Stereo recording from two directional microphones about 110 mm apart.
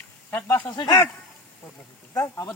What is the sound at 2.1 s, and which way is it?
Speech, 25° left (ahead or behind).